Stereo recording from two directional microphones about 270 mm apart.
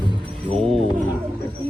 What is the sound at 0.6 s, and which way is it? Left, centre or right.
Mantra, centre.